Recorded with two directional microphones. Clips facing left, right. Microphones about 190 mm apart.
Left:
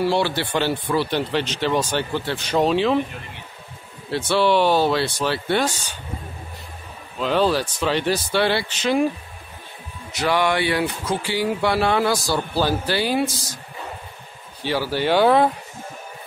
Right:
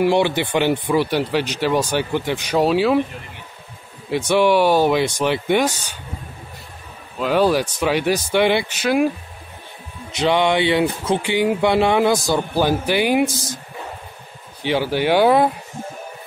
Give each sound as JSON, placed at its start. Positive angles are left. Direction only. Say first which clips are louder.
{"t": 0.0, "sound": "speech", "louder": "right 4 dB", "side_deg": -15}
{"t": 4.1, "sound": "speech", "louder": "right 3 dB", "side_deg": -15}
{"t": 7.2, "sound": "speech", "louder": "right 3 dB", "side_deg": -10}
{"t": 10.1, "sound": "speech", "louder": "right 3 dB", "side_deg": -20}
{"t": 14.6, "sound": "speech", "louder": "right 3 dB", "side_deg": -20}